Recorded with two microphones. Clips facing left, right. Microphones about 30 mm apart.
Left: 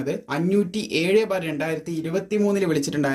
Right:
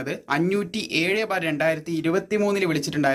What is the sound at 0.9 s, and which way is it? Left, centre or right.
Speech, centre.